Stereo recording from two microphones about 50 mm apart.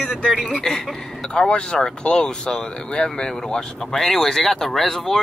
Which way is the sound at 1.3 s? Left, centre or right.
Centre.